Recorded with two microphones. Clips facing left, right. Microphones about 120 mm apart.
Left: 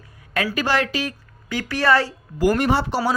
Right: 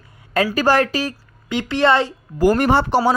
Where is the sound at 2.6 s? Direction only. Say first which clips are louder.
Right 4 dB; 55° right (ahead or behind).